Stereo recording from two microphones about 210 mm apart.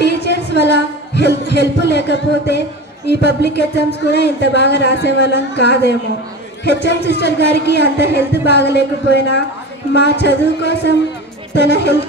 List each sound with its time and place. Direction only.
0.0 s music: 55° left (ahead or behind)
3.1 s speech: 55° left (ahead or behind)